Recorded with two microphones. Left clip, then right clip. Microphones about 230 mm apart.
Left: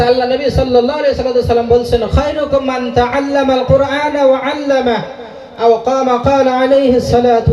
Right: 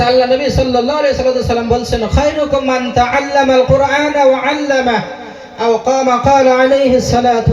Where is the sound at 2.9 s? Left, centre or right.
Right.